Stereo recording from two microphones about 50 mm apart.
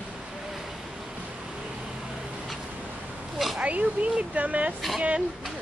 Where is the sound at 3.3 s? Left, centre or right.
Centre.